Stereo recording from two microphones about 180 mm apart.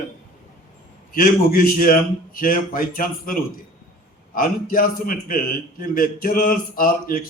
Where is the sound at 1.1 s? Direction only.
50° left (ahead or behind).